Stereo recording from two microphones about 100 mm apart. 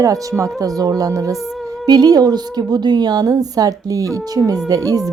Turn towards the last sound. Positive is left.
turn(degrees=-35)  # may be behind; listen again after turning